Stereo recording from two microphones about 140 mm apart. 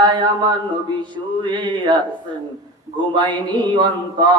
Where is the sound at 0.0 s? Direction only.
35° right (ahead or behind).